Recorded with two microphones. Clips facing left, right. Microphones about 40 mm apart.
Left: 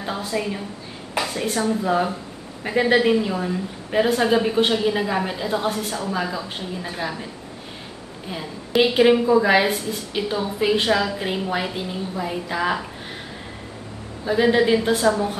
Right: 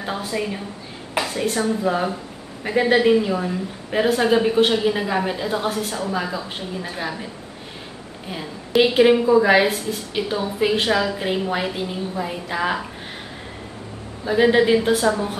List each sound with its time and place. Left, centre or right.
0.0 s a woman's voice: centre
8.3 s a woman's voice: centre
14.2 s a woman's voice: centre